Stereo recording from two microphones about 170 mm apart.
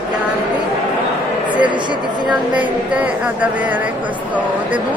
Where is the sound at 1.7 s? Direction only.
25° right (ahead or behind).